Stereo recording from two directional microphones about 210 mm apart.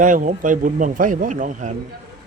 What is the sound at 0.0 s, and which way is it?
Speech, 40° right (ahead or behind).